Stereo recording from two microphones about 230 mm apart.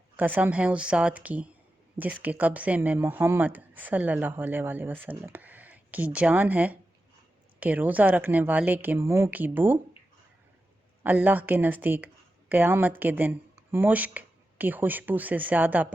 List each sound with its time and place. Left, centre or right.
0.2 s a woman's voice: centre
11.0 s speech: centre